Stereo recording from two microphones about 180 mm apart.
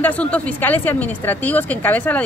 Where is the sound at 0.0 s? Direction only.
10° left (ahead or behind).